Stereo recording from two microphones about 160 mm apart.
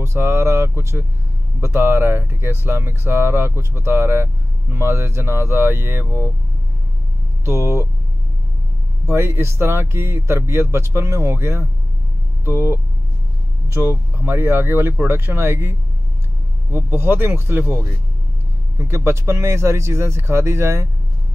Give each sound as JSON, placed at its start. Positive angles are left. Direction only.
{"t": 0.0, "sound": "speech", "side_deg": -15}
{"t": 7.4, "sound": "speech", "side_deg": -15}
{"t": 9.0, "sound": "speech", "side_deg": -15}
{"t": 16.7, "sound": "speech", "side_deg": -15}
{"t": 18.8, "sound": "speech", "side_deg": -15}